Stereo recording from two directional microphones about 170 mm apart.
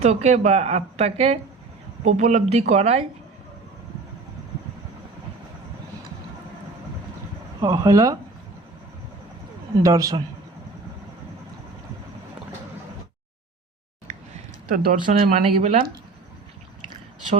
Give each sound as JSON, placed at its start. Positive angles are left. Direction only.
{"t": 0.0, "sound": "a woman's voice", "side_deg": -40}
{"t": 7.6, "sound": "speech", "side_deg": -20}
{"t": 9.8, "sound": "speech", "side_deg": -20}
{"t": 14.7, "sound": "speech", "side_deg": -55}
{"t": 15.4, "sound": "a woman's voice", "side_deg": -35}